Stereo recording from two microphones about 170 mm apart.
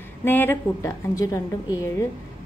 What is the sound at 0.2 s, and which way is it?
A woman's voice, 10° left (ahead or behind).